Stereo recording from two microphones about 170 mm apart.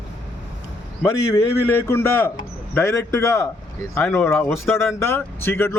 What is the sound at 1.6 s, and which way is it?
Speech, 15° left (ahead or behind).